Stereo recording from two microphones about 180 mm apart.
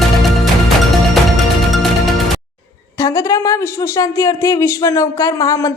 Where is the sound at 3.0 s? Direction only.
15° left (ahead or behind).